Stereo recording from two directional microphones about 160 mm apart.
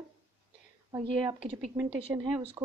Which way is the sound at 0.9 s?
35° right (ahead or behind).